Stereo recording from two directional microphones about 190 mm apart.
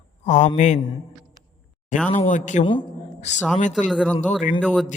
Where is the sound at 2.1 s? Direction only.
40° left (ahead or behind).